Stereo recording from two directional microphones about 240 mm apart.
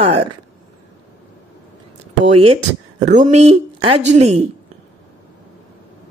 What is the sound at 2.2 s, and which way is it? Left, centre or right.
Speech, right.